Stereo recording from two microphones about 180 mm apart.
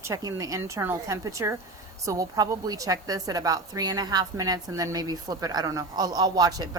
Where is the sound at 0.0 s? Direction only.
20° right (ahead or behind).